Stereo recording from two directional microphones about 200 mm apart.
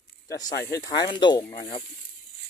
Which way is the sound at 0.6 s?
15° left (ahead or behind).